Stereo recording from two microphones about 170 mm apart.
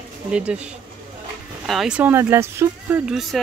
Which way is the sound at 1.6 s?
Centre (ahead or behind).